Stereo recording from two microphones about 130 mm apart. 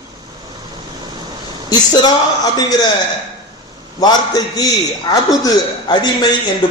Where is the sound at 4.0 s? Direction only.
30° left (ahead or behind).